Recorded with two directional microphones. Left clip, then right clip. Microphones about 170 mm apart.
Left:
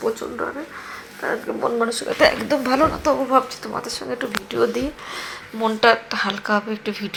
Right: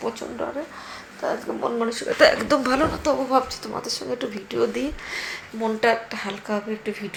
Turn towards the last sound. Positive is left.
turn(degrees=10)  # may be behind; listen again after turning